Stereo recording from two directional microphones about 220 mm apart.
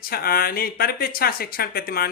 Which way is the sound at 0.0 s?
45° left (ahead or behind).